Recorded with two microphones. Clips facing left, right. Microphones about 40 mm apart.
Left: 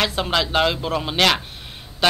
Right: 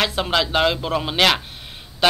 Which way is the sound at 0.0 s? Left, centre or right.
Centre.